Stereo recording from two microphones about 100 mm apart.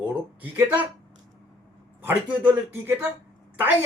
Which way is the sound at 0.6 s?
20° right (ahead or behind).